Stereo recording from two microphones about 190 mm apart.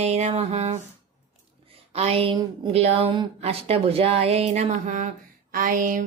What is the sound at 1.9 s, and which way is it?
Speech, 30° right (ahead or behind).